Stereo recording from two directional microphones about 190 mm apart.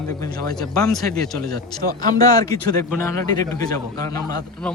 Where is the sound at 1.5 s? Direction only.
20° left (ahead or behind).